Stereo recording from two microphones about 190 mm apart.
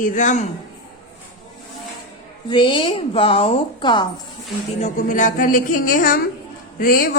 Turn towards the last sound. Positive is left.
turn(degrees=50)  # may be behind; listen again after turning